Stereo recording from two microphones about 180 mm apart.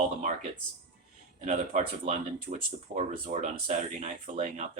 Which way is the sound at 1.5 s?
40° right (ahead or behind).